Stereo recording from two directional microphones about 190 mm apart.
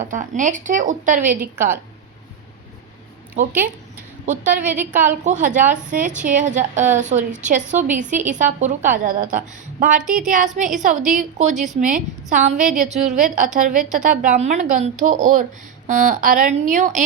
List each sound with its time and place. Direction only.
0.0 s a woman's voice: 40° right (ahead or behind)
4.5 s a woman's voice: 10° right (ahead or behind)
4.9 s a woman's voice: 40° right (ahead or behind)